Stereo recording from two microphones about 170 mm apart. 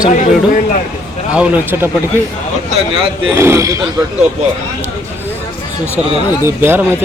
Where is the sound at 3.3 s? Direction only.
15° right (ahead or behind).